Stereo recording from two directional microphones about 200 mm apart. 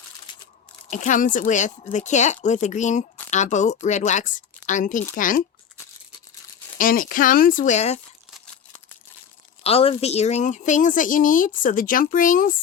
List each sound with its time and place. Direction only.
0.9 s speech: 40° left (ahead or behind)
6.7 s speech: 45° left (ahead or behind)
9.6 s speech: 30° left (ahead or behind)